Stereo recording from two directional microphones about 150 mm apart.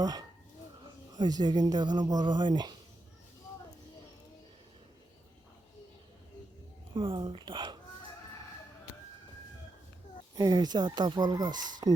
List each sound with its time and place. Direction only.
0.0 s speech: 25° right (ahead or behind)
6.9 s speech: 35° right (ahead or behind)
10.3 s speech: 25° right (ahead or behind)